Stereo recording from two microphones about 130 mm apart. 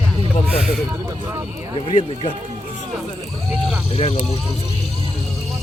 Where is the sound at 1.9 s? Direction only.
40° left (ahead or behind).